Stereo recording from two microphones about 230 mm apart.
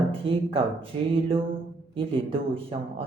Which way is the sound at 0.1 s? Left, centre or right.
Right.